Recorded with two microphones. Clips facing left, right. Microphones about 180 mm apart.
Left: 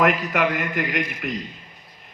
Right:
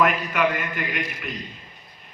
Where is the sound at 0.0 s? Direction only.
80° left.